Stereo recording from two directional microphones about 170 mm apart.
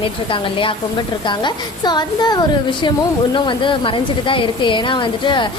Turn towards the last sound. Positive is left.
turn(degrees=30)  # may be behind; listen again after turning